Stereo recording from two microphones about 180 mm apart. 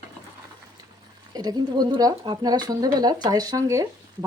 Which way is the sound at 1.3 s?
20° right (ahead or behind).